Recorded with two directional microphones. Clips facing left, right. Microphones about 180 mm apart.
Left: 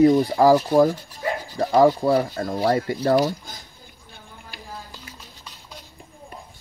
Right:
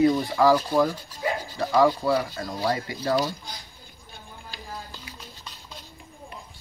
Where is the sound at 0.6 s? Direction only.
25° left (ahead or behind).